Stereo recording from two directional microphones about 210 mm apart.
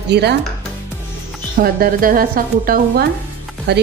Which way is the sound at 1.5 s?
45° right (ahead or behind).